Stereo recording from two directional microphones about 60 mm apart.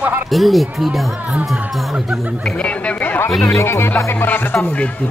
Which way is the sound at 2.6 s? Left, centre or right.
Left.